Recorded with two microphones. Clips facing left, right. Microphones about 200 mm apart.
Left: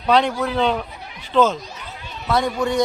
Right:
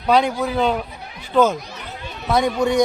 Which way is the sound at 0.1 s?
10° right (ahead or behind).